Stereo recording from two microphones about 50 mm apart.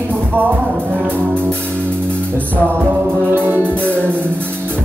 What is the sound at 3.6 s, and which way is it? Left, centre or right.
Music, left.